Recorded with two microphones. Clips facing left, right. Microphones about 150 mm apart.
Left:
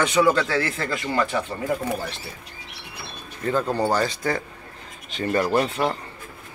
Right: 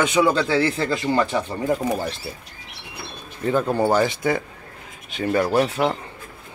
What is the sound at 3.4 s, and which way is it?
Speech, 15° right (ahead or behind).